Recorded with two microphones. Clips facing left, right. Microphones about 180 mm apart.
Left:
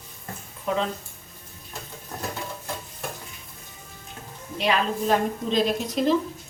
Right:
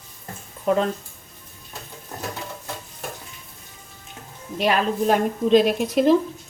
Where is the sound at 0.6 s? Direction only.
45° right (ahead or behind).